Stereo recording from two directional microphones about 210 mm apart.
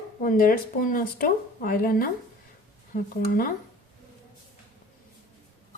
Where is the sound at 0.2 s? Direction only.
40° left (ahead or behind).